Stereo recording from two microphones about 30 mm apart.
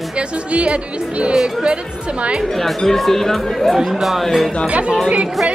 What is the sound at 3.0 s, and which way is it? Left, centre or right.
Speech, centre.